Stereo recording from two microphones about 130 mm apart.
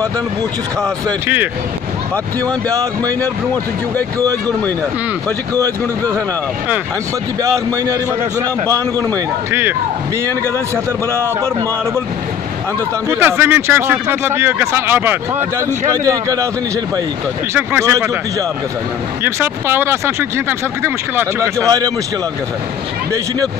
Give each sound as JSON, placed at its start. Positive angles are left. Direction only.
{"t": 0.8, "sound": "speech", "side_deg": -20}
{"t": 2.4, "sound": "speech", "side_deg": -25}
{"t": 4.2, "sound": "speech", "side_deg": -30}
{"t": 7.4, "sound": "speech", "side_deg": -25}
{"t": 11.1, "sound": "speech", "side_deg": -20}
{"t": 13.1, "sound": "speech", "side_deg": -15}
{"t": 16.0, "sound": "speech", "side_deg": -25}
{"t": 17.6, "sound": "speech", "side_deg": -20}
{"t": 19.2, "sound": "speech", "side_deg": -15}
{"t": 21.6, "sound": "speech", "side_deg": -30}